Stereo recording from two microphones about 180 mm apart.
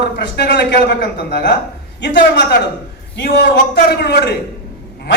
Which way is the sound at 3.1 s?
75° left (ahead or behind).